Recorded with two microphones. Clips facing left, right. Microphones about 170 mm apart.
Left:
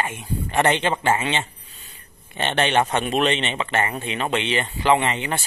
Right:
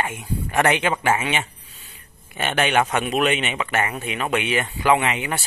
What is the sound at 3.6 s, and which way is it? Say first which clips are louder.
Speech: even; 10° right (ahead or behind).